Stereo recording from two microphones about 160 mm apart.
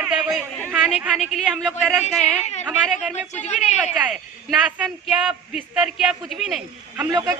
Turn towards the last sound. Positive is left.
turn(degrees=-25)  # may be behind; listen again after turning